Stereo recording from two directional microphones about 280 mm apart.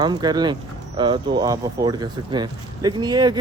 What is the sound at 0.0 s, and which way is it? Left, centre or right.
Speech, centre.